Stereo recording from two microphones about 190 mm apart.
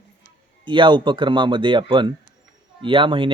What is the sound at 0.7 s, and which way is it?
Speech, 25° right (ahead or behind).